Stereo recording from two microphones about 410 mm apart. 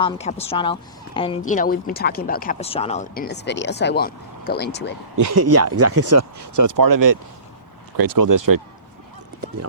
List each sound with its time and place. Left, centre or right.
0.0 s a woman's voice: centre
5.1 s speech: right